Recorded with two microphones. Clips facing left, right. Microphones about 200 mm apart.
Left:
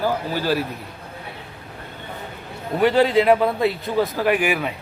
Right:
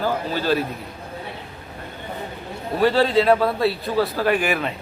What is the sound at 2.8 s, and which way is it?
Speech, 20° left (ahead or behind).